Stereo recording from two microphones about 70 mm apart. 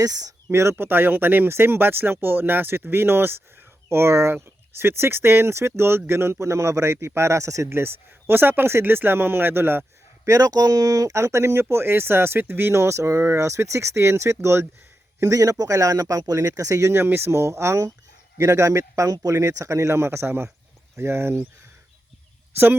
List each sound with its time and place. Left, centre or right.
0.0 s speech: right
0.5 s speech: right
10.2 s speech: right
15.2 s speech: right
22.5 s speech: right